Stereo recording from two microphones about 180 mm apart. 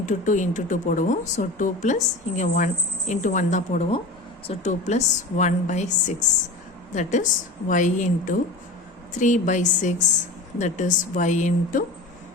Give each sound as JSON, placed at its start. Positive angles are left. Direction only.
{"t": 0.0, "sound": "a woman's voice", "side_deg": 45}